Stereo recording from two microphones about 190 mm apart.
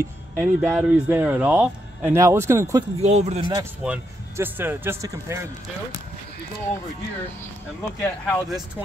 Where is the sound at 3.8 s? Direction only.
10° right (ahead or behind).